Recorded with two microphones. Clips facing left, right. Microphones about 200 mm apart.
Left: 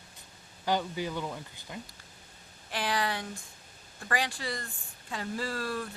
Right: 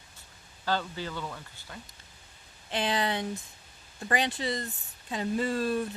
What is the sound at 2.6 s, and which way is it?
Speech, 20° right (ahead or behind).